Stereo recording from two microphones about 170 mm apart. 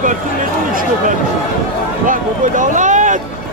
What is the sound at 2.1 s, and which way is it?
Speech, 50° right (ahead or behind).